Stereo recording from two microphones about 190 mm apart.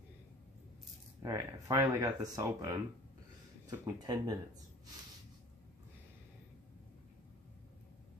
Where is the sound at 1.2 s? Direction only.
20° right (ahead or behind).